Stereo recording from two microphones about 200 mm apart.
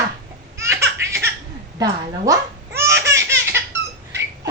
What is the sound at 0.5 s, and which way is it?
Laughter, 15° right (ahead or behind).